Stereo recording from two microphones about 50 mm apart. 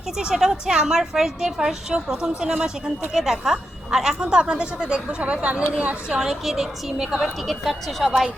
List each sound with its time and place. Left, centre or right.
0.2 s a woman's voice: centre
6.1 s a woman's voice: centre